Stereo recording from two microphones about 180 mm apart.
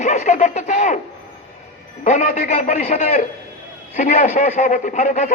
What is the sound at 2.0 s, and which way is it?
A man's voice, 40° left (ahead or behind).